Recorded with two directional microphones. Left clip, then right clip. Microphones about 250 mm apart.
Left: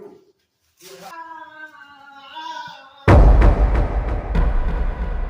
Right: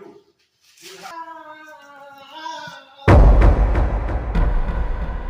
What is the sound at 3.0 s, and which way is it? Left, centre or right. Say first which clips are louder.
Music: even; centre.